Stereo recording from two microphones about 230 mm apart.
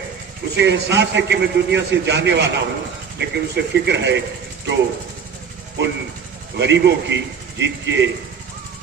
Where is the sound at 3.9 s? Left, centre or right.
Right.